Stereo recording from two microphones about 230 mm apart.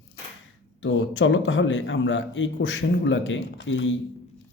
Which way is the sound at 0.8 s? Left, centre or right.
Left.